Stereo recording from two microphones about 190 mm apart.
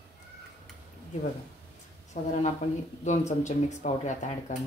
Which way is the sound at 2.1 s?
45° left (ahead or behind).